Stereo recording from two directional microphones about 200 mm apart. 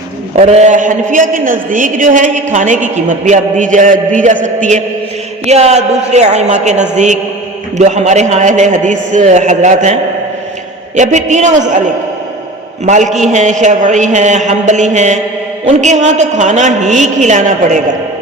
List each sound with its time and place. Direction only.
0.3 s a man's voice: 35° right (ahead or behind)
12.8 s a man's voice: 35° right (ahead or behind)